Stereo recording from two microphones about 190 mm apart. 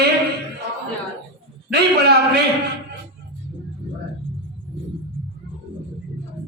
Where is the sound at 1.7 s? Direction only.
55° right (ahead or behind).